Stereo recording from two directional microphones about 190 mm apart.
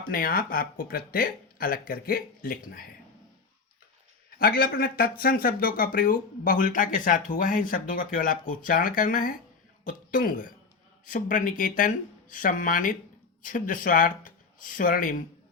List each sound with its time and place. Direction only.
0.0 s speech: 50° left (ahead or behind)
4.4 s speech: 50° left (ahead or behind)